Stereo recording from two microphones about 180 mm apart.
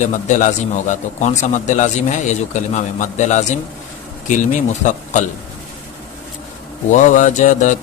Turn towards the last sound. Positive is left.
turn(degrees=45)  # may be behind; listen again after turning